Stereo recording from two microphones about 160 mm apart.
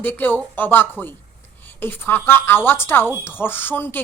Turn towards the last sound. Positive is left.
turn(degrees=10)  # may be behind; listen again after turning